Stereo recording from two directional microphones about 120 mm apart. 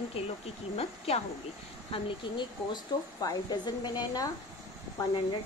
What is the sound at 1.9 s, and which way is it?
A woman's voice, 40° left (ahead or behind).